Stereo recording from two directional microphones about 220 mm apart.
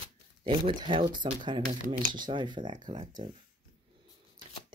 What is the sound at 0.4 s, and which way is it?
Speech, 25° right (ahead or behind).